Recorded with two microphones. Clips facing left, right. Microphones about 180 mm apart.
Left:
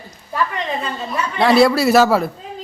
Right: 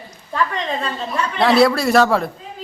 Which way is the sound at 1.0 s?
Centre (ahead or behind).